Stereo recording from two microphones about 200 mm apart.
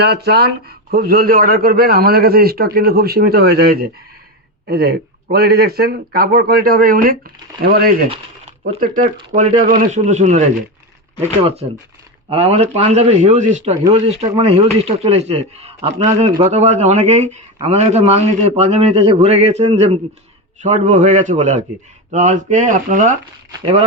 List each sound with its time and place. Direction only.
0.0 s speech: 55° right (ahead or behind)
8.1 s a sound: 30° right (ahead or behind)
8.8 s a man's voice: 40° right (ahead or behind)
12.3 s a man's voice: 30° right (ahead or behind)